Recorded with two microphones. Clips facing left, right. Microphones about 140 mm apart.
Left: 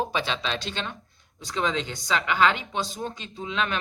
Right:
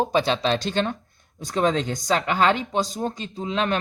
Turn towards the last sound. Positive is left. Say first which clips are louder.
# right 5 dB
turn(degrees=-40)  # may be behind; listen again after turning